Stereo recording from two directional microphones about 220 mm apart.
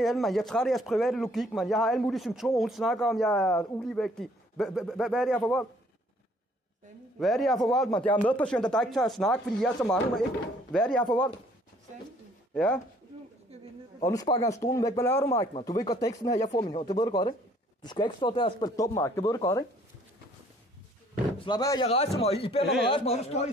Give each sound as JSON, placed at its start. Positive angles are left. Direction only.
{"t": 0.0, "sound": "speech", "side_deg": 0}
{"t": 7.2, "sound": "speech", "side_deg": 0}
{"t": 12.5, "sound": "speech", "side_deg": 5}
{"t": 14.0, "sound": "a man's voice", "side_deg": 15}
{"t": 21.5, "sound": "a man's voice", "side_deg": 20}